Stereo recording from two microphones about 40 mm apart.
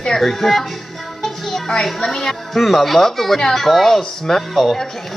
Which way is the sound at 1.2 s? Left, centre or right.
Centre.